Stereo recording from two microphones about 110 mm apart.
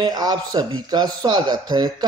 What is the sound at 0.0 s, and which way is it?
A man's voice, 40° right (ahead or behind).